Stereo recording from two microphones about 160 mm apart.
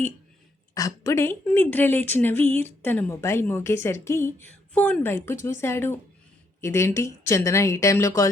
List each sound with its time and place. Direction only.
0.7 s a woman's voice: 20° left (ahead or behind)